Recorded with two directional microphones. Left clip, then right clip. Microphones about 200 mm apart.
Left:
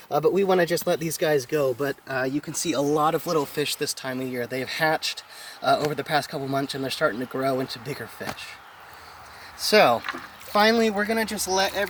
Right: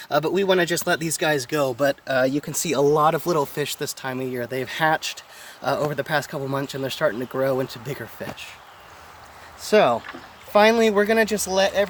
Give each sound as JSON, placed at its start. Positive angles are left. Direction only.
{"t": 0.3, "sound": "speech", "side_deg": -30}
{"t": 2.9, "sound": "speech", "side_deg": -35}
{"t": 9.6, "sound": "speech", "side_deg": 5}
{"t": 10.5, "sound": "speech", "side_deg": -25}